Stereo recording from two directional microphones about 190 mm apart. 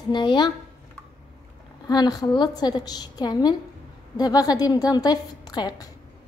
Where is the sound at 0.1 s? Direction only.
25° left (ahead or behind).